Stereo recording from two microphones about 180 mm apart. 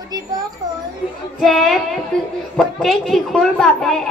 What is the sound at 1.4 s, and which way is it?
A child's voice, centre (ahead or behind).